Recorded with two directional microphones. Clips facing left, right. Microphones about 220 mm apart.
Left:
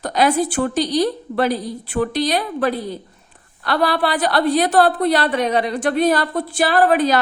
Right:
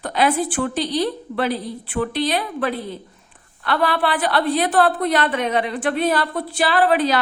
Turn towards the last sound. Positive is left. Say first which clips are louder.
# left 2 dB
turn(degrees=45)  # may be behind; listen again after turning